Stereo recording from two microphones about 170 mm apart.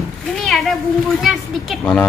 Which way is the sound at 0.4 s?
Centre (ahead or behind).